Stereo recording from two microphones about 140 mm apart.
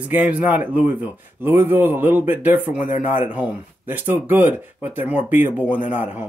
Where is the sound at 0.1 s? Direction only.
10° right (ahead or behind).